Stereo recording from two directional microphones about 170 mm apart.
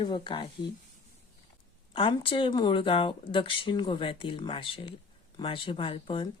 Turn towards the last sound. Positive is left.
turn(degrees=30)  # may be behind; listen again after turning